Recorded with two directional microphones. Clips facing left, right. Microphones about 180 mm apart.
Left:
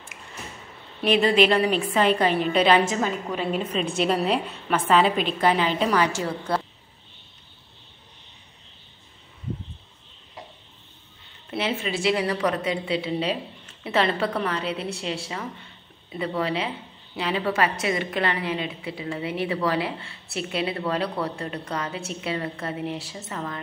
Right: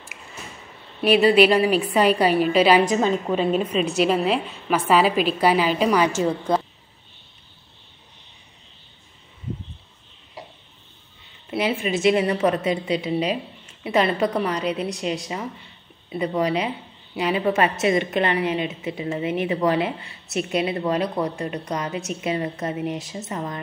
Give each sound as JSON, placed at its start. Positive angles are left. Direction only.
{"t": 1.0, "sound": "a woman's voice", "side_deg": -10}
{"t": 2.9, "sound": "a woman's voice", "side_deg": -20}
{"t": 4.0, "sound": "a woman's voice", "side_deg": -5}
{"t": 11.5, "sound": "a woman's voice", "side_deg": -15}